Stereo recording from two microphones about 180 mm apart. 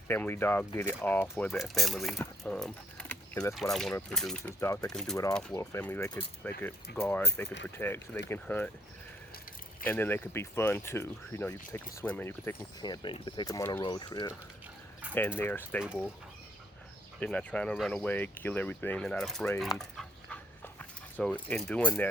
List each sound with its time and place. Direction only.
0.1 s speech: 10° left (ahead or behind)
2.4 s a sound: 5° left (ahead or behind)
3.5 s speech: centre (ahead or behind)
4.6 s speech: 15° left (ahead or behind)
4.9 s speech: 5° left (ahead or behind)
9.8 s speech: 10° left (ahead or behind)
12.8 s speech: 25° left (ahead or behind)
15.0 s dog: 10° right (ahead or behind)
15.4 s speech: 10° left (ahead or behind)
17.2 s speech: 5° left (ahead or behind)
19.7 s dog: 5° left (ahead or behind)
21.5 s speech: 5° left (ahead or behind)